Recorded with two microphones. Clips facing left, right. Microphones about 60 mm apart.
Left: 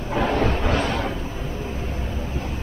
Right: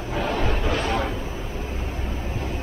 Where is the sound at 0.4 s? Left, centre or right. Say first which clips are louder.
Left 3 dB; left.